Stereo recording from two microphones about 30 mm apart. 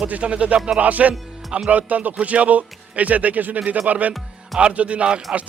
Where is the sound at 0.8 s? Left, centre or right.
Right.